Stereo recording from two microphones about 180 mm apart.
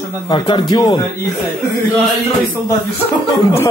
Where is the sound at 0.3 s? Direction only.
25° left (ahead or behind).